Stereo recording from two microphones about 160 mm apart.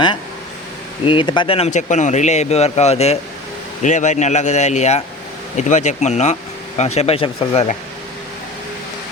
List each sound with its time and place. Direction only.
1.0 s speech: 30° left (ahead or behind)